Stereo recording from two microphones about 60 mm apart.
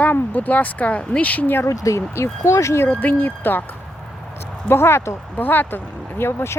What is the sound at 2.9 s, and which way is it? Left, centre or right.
Speech, left.